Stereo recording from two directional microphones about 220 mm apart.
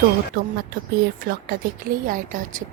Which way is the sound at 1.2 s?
40° right (ahead or behind).